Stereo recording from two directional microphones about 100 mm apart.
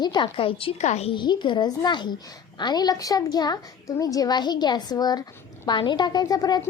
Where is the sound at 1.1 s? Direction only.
50° left (ahead or behind).